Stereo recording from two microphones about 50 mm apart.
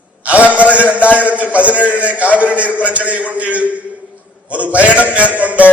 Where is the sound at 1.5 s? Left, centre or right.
Right.